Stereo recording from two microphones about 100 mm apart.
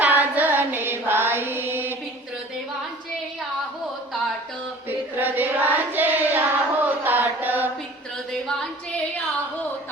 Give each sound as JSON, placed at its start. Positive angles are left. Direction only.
{"t": 0.0, "sound": "carnatic music", "side_deg": -15}
{"t": 4.9, "sound": "child singing", "side_deg": -20}
{"t": 8.3, "sound": "singing", "side_deg": 5}